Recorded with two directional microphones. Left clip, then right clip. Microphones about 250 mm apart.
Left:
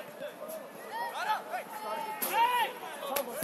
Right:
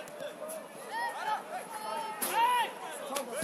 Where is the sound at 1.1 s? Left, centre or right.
Left.